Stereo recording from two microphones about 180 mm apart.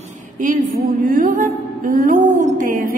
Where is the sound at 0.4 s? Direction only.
45° right (ahead or behind).